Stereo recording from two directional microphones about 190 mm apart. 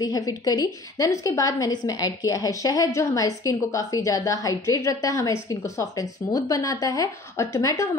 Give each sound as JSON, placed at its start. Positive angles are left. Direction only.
{"t": 0.0, "sound": "a woman's voice", "side_deg": 20}